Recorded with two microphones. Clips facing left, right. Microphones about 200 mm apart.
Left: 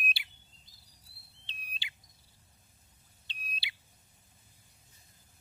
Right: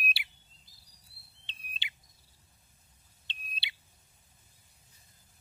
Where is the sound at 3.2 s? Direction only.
25° right (ahead or behind).